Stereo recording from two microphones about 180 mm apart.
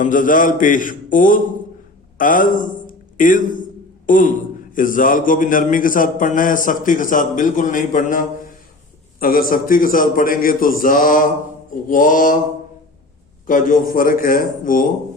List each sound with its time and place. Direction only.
0.0 s a man's voice: 45° left (ahead or behind)
13.5 s a man's voice: 45° left (ahead or behind)